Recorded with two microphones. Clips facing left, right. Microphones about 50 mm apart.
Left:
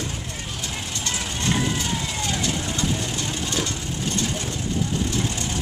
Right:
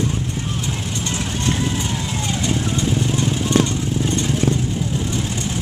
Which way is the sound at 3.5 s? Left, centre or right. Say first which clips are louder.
Right 11 dB; right.